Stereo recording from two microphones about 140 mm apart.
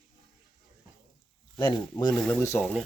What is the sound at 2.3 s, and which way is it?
Speech, 15° left (ahead or behind).